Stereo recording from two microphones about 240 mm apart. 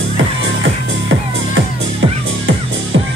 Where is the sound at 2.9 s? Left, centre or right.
Right.